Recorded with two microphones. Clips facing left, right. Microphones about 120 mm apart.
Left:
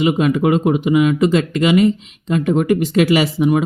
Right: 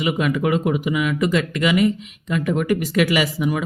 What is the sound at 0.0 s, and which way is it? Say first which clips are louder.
Speech: left 5 dB; 30° left (ahead or behind).